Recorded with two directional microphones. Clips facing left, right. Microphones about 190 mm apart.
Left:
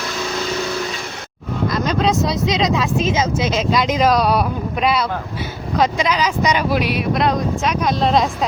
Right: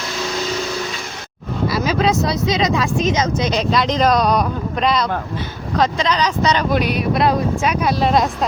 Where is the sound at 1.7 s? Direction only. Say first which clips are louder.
Right 1 dB; 5° right (ahead or behind).